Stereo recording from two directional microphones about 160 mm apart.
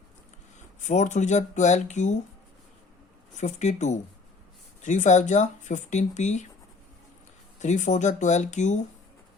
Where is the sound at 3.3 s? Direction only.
45° left (ahead or behind).